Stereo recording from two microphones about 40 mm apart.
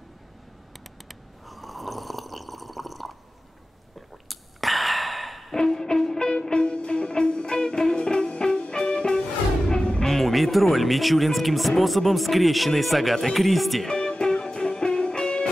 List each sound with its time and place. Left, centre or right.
1.0 s snoring: centre
4.3 s a sound: centre
5.6 s music: centre
6.1 s music: left
10.0 s speech: centre
13.8 s music: left